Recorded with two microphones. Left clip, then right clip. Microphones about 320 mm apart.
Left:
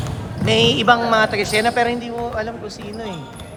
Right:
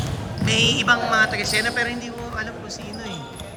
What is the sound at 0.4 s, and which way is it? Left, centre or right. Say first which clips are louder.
A woman's voice: left 4 dB; centre.